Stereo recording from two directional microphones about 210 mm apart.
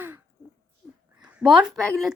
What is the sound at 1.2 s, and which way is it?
Speech, 5° right (ahead or behind).